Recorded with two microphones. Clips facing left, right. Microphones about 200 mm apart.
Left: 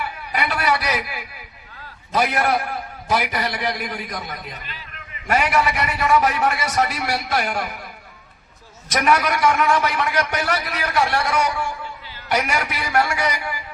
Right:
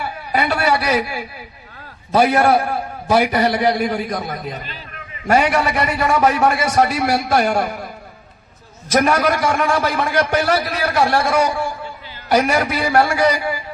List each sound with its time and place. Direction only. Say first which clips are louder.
0.0 s a sound: right 5 dB; 30° right (ahead or behind)
2.1 s a man's voice: right 6 dB; 30° right (ahead or behind)
8.9 s a man's voice: right 4 dB; 30° right (ahead or behind)